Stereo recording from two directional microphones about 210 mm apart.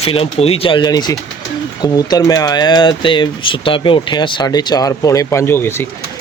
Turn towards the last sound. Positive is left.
turn(degrees=10)  # may be behind; listen again after turning